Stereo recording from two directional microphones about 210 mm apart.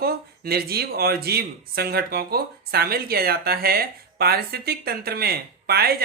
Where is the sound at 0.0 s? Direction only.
45° right (ahead or behind).